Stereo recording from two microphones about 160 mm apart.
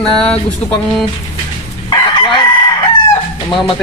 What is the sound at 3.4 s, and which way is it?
Speech, 30° left (ahead or behind).